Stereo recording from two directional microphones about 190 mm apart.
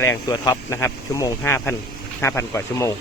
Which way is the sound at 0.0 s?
15° left (ahead or behind).